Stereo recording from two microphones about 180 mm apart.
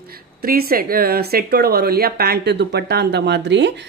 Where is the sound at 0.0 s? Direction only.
55° right (ahead or behind).